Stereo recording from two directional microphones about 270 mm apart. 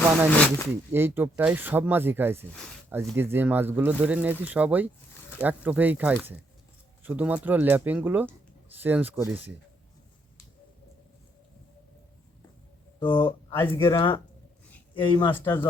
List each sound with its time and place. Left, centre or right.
0.3 s speech: centre
0.7 s speech: centre
13.2 s speech: centre